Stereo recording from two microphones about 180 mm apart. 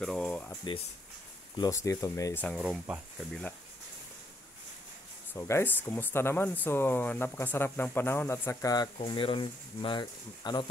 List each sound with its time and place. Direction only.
0.0 s a sound: 5° left (ahead or behind)
1.6 s speech: 15° left (ahead or behind)
2.4 s speech: centre (ahead or behind)
5.3 s speech: 15° left (ahead or behind)